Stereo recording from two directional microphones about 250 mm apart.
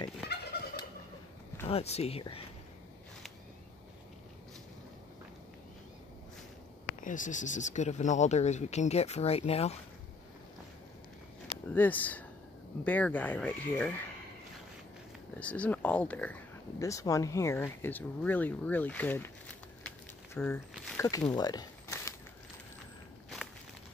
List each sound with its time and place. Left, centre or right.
0.3 s fowl: left
1.7 s speech: left
7.0 s speech: left
11.7 s speech: centre
15.3 s speech: centre
21.3 s a sound: centre